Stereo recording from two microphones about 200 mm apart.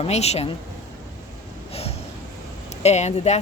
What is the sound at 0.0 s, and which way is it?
Speech, 30° left (ahead or behind).